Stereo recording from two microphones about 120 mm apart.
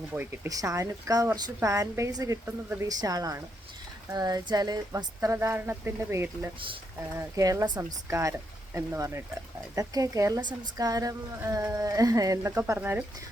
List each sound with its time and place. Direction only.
0.1 s speech: 15° right (ahead or behind)
0.4 s a woman's voice: 30° right (ahead or behind)